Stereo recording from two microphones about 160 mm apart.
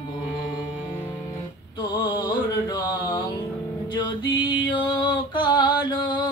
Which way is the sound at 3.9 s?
30° left (ahead or behind).